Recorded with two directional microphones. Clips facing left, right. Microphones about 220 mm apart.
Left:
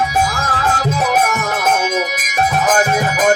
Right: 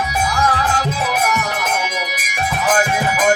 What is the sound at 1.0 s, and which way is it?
Music, 45° left (ahead or behind).